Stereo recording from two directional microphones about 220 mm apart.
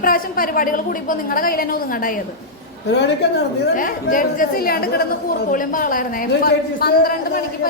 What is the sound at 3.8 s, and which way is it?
A woman's voice, 40° left (ahead or behind).